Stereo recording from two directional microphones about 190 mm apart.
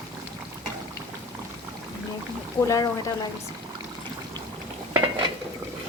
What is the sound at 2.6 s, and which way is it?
Speech, 15° left (ahead or behind).